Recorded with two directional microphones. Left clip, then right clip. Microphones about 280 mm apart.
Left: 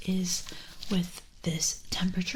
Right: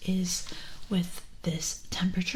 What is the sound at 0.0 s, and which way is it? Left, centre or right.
A woman's voice, centre.